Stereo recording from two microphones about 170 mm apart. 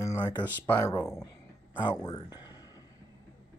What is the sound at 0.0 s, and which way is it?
Speech, 15° left (ahead or behind).